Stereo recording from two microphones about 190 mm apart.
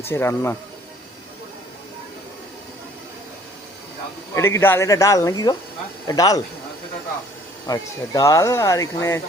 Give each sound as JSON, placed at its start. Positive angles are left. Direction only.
{"t": 0.0, "sound": "speech", "side_deg": 10}
{"t": 4.4, "sound": "speech", "side_deg": 15}
{"t": 7.7, "sound": "speech", "side_deg": 20}